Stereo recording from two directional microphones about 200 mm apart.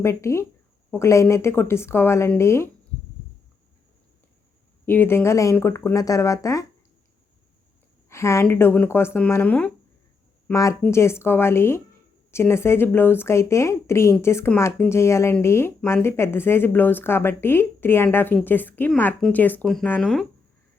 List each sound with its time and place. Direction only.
0.0 s speech: 15° left (ahead or behind)
4.9 s speech: 10° left (ahead or behind)
8.1 s speech: 15° left (ahead or behind)